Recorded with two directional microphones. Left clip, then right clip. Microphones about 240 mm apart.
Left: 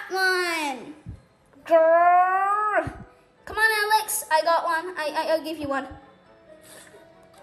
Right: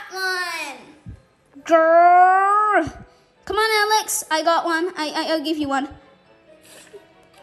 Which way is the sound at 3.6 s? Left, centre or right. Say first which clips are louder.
Right 2 dB; right.